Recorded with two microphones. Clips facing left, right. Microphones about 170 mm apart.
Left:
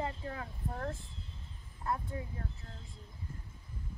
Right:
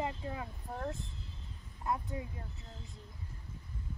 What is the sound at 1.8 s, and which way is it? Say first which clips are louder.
Speech: even; 20° right (ahead or behind).